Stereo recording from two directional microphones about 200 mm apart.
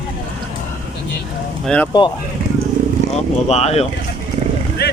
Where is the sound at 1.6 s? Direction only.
5° left (ahead or behind).